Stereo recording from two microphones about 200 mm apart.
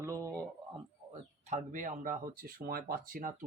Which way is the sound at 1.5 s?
40° right (ahead or behind).